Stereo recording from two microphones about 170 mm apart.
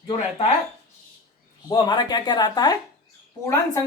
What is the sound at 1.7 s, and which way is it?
Speech, 25° left (ahead or behind).